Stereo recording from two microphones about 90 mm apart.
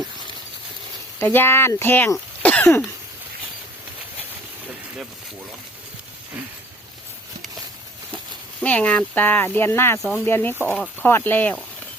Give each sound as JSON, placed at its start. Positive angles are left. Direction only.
{"t": 1.2, "sound": "speech", "side_deg": 25}
{"t": 2.4, "sound": "cough", "side_deg": 15}
{"t": 8.6, "sound": "speech", "side_deg": 15}